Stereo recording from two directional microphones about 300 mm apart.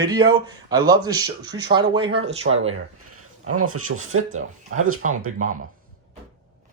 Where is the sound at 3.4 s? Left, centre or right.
Right.